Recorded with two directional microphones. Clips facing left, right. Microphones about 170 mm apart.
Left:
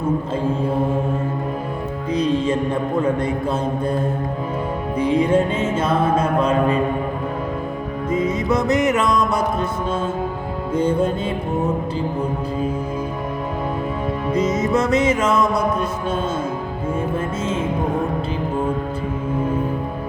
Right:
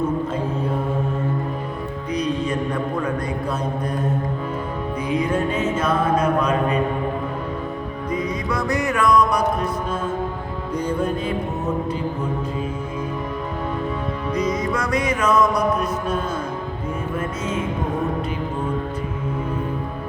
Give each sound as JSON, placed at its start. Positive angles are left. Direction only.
{"t": 2.1, "sound": "music", "side_deg": 25}
{"t": 4.9, "sound": "music", "side_deg": 30}
{"t": 8.1, "sound": "music", "side_deg": 25}
{"t": 10.8, "sound": "music", "side_deg": 25}
{"t": 14.3, "sound": "music", "side_deg": 25}